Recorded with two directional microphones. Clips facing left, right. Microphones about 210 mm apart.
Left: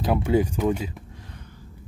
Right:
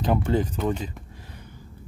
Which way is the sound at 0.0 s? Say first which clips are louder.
Left 2 dB; 10° left (ahead or behind).